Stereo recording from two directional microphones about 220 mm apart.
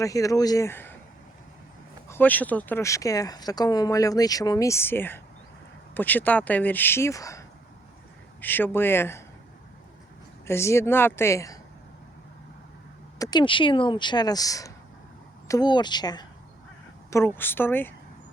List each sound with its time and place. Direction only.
0.0 s speech: 15° left (ahead or behind)
2.0 s speech: 10° left (ahead or behind)
10.4 s speech: 10° left (ahead or behind)
13.1 s speech: 15° left (ahead or behind)